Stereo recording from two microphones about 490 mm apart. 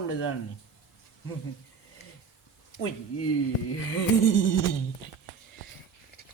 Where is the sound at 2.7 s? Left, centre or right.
Left.